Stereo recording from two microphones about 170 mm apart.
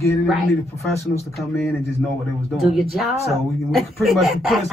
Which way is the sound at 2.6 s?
Centre (ahead or behind).